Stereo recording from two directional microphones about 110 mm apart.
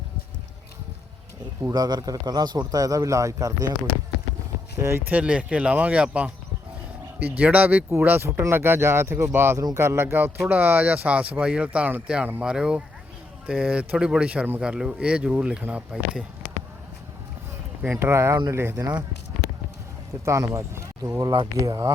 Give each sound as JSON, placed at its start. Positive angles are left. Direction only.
{"t": 1.7, "sound": "a man's voice", "side_deg": -35}
{"t": 4.8, "sound": "speech", "side_deg": -20}
{"t": 18.0, "sound": "speech", "side_deg": -25}
{"t": 20.2, "sound": "a man's voice", "side_deg": -30}